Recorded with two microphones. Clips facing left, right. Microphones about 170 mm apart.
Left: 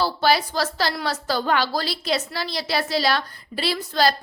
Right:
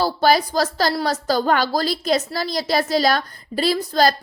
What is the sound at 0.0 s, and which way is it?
A woman's voice, 45° right (ahead or behind).